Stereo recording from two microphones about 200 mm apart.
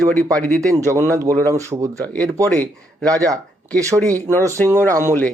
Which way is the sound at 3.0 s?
15° right (ahead or behind).